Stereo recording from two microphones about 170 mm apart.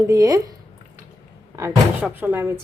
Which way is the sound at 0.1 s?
20° right (ahead or behind).